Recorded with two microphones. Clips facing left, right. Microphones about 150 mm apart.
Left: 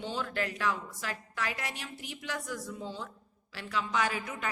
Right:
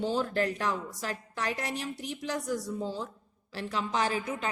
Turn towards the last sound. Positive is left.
turn(degrees=-30)  # may be behind; listen again after turning